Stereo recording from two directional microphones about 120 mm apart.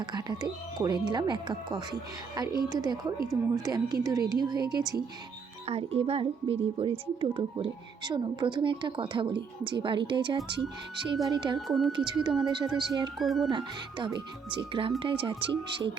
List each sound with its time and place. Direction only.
0.0 s speech: 35° right (ahead or behind)
5.6 s speech: 60° right (ahead or behind); by 11.5 s 40° right (ahead or behind)
11.5 s a woman's voice: centre (ahead or behind)
11.9 s speech: 40° right (ahead or behind)
13.1 s a woman's voice: centre (ahead or behind)
13.5 s speech: 40° right (ahead or behind)